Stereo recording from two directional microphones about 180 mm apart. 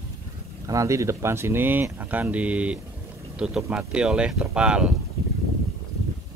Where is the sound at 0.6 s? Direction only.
15° right (ahead or behind).